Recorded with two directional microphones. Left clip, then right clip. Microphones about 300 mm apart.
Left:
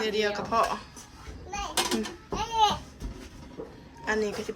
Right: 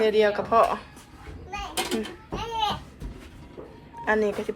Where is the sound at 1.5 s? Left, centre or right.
Centre.